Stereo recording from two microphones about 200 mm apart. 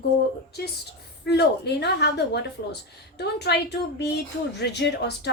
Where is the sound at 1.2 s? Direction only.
55° left (ahead or behind).